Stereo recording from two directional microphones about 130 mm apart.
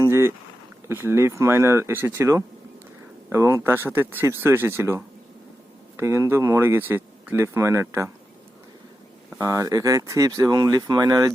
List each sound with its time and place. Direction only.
0.0 s a sound: 20° right (ahead or behind)
0.9 s speech: 20° right (ahead or behind)
9.4 s speech: 25° right (ahead or behind)